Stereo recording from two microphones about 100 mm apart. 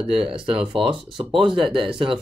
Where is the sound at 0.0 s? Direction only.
70° right (ahead or behind).